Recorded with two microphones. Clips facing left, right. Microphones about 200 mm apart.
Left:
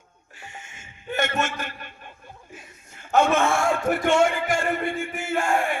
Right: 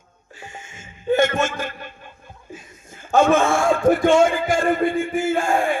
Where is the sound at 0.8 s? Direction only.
45° right (ahead or behind).